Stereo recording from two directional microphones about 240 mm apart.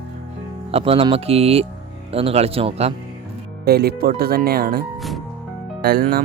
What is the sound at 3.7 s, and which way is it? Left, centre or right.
Speech, right.